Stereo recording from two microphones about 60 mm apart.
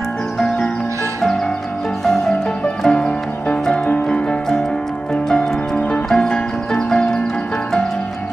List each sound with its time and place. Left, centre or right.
2.0 s music: centre